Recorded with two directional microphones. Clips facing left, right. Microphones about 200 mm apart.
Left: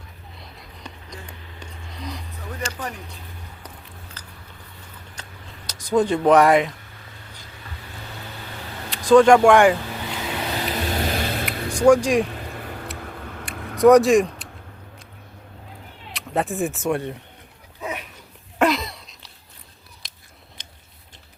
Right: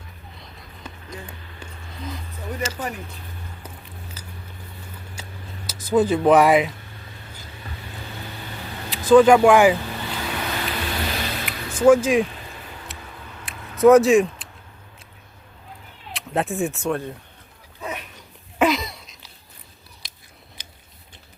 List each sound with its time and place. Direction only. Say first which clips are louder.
0.3 s a sound: left 2 dB; centre (ahead or behind)
4.2 s a sound: right 3 dB; 10° right (ahead or behind)
5.6 s speech: right 1 dB; 5° right (ahead or behind)
8.9 s speech: even; 5° right (ahead or behind)
10.2 s vehicle: left 2 dB; 20° left (ahead or behind); by 11.7 s 50° left (ahead or behind)
11.7 s speech: right 1 dB; 5° right (ahead or behind)
12.3 s a sound: left 5 dB; 55° left (ahead or behind)
13.8 s speech: even; centre (ahead or behind)
16.1 s speech: even; centre (ahead or behind)
16.8 s speech: left 1 dB; 20° left (ahead or behind)
17.7 s dog: left 1 dB; 10° left (ahead or behind)
18.6 s a sound: even; centre (ahead or behind)